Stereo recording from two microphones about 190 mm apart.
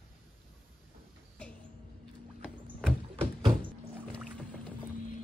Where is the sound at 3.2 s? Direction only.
25° right (ahead or behind).